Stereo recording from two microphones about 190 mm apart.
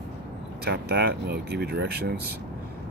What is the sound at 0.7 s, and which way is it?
Speech, 60° right (ahead or behind).